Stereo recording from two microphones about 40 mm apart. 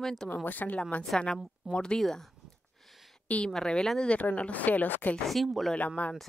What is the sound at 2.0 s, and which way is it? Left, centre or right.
Speech, centre.